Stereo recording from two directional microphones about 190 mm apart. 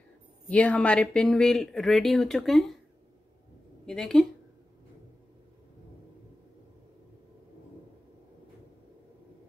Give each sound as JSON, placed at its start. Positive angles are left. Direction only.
{"t": 0.5, "sound": "speech", "side_deg": 5}
{"t": 3.8, "sound": "speech", "side_deg": 5}